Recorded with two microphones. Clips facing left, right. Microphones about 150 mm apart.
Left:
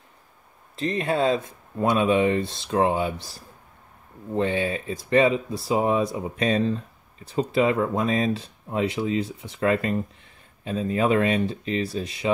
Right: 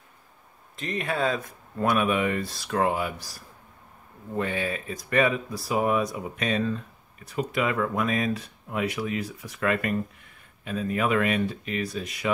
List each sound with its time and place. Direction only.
0.7 s speech: 30° left (ahead or behind)